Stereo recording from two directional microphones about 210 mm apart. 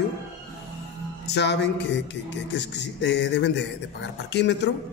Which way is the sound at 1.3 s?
55° left (ahead or behind).